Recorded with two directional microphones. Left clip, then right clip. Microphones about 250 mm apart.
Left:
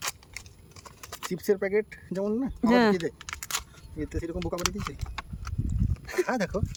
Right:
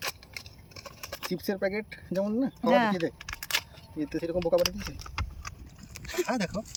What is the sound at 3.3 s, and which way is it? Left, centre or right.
Single-lens reflex camera, left.